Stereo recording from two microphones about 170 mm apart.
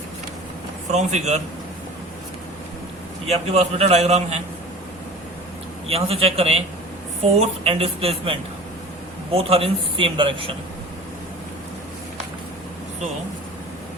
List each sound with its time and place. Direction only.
0.9 s a man's voice: 40° right (ahead or behind)
3.2 s a man's voice: 40° right (ahead or behind)
5.9 s a man's voice: 35° right (ahead or behind)